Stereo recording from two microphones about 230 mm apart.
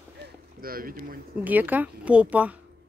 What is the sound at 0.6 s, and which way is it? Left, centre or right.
Boat, right.